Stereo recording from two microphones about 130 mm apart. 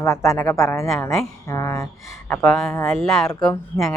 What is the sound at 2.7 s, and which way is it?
Speech, 25° left (ahead or behind).